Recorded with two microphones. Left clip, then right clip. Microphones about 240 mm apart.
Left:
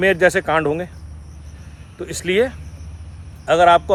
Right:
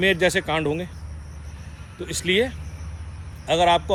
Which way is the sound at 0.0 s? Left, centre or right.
Left.